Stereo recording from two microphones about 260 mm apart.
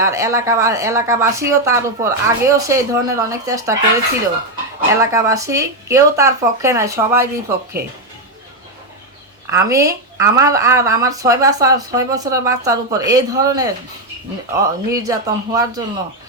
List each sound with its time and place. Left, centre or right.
0.0 s speech: centre
4.9 s speech: centre
9.5 s speech: centre